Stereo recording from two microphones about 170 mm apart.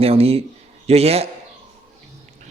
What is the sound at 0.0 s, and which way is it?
A man's voice, 35° right (ahead or behind).